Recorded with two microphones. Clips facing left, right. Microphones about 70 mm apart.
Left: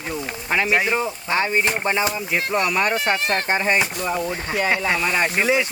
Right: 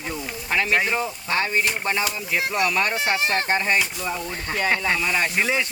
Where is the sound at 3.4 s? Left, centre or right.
Centre.